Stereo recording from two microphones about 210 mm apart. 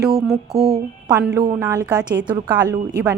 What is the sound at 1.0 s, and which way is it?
A woman's voice, 5° right (ahead or behind).